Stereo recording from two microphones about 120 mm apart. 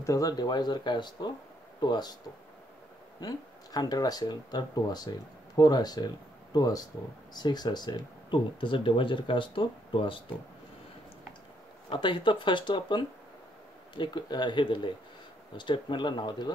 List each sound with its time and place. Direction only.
0.0 s speech: 30° left (ahead or behind)
3.2 s speech: 35° left (ahead or behind)
11.9 s speech: 45° left (ahead or behind)